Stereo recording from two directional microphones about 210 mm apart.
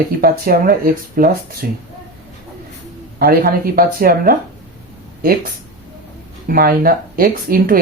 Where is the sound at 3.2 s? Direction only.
45° right (ahead or behind).